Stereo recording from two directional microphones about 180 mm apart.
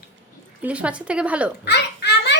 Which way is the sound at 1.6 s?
70° left (ahead or behind).